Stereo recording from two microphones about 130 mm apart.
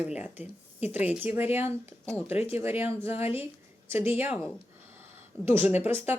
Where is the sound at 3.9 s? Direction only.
15° right (ahead or behind).